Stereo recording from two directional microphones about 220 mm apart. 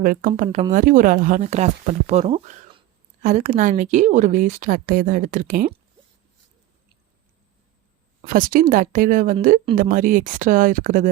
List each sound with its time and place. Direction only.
0.0 s a woman's voice: 40° right (ahead or behind)
8.2 s a woman's voice: 40° right (ahead or behind)